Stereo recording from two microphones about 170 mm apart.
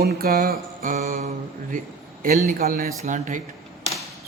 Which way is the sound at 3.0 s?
45° right (ahead or behind).